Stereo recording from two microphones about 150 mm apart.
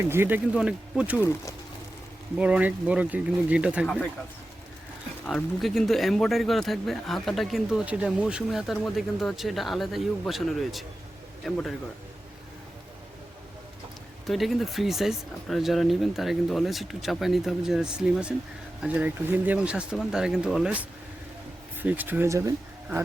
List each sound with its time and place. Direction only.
0.0 s speech: 15° right (ahead or behind)
2.4 s speech: 10° right (ahead or behind)
5.2 s speech: centre (ahead or behind)
14.3 s speech: centre (ahead or behind); by 23.0 s 20° right (ahead or behind)